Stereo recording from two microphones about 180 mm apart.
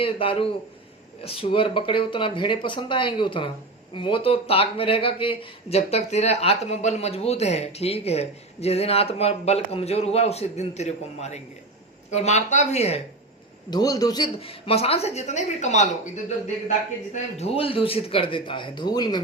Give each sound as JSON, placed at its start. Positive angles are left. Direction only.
{"t": 0.0, "sound": "speech", "side_deg": 30}
{"t": 13.7, "sound": "speech", "side_deg": 20}
{"t": 17.3, "sound": "speech", "side_deg": 35}